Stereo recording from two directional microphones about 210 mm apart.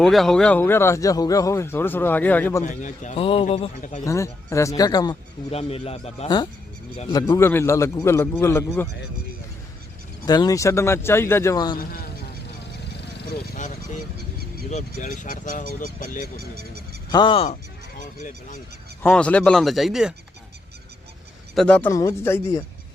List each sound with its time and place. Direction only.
0.0 s speech: centre (ahead or behind)
2.6 s speech: 35° left (ahead or behind)
4.0 s speech: 15° left (ahead or behind)
10.2 s speech: 20° left (ahead or behind)
11.8 s speech: 45° left (ahead or behind)
13.3 s speech: 35° left (ahead or behind)
14.2 s goose: 50° right (ahead or behind)
14.7 s speech: 35° left (ahead or behind)
16.4 s a sound: 50° right (ahead or behind)
17.1 s speech: 20° left (ahead or behind); by 18.6 s 40° left (ahead or behind)
19.0 s speech: 5° left (ahead or behind)
21.5 s speech: 5° left (ahead or behind)